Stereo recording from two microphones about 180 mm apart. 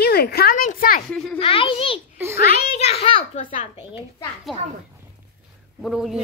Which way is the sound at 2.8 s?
35° left (ahead or behind).